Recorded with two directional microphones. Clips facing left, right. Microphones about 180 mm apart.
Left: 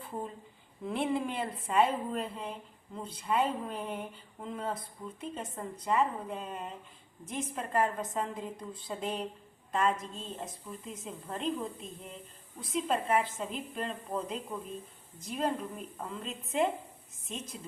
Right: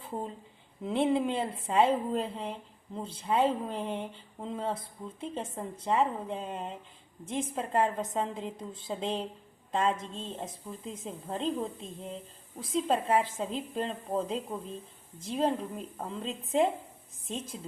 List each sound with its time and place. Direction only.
0.9 s a woman's voice: 25° right (ahead or behind)